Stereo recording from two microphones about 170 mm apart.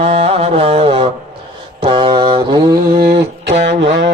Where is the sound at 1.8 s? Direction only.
30° right (ahead or behind).